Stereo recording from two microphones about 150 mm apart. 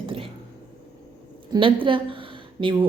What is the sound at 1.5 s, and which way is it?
A woman's voice, 30° right (ahead or behind).